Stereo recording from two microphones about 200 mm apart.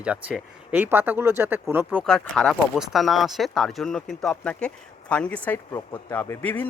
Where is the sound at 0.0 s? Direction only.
5° right (ahead or behind).